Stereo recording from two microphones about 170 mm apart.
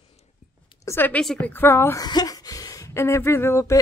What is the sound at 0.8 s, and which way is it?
A woman's voice, 15° left (ahead or behind).